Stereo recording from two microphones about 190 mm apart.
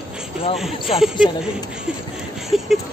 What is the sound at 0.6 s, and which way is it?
Speech, centre (ahead or behind).